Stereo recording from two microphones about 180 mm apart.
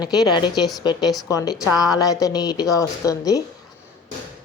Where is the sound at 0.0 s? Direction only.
20° left (ahead or behind).